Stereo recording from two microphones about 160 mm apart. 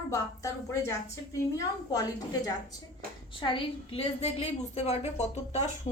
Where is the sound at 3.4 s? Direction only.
35° left (ahead or behind).